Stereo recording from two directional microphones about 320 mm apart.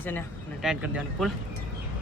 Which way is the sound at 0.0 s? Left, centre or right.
Centre.